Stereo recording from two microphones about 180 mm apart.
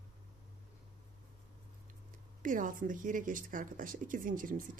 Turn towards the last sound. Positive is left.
turn(degrees=-50)  # may be behind; listen again after turning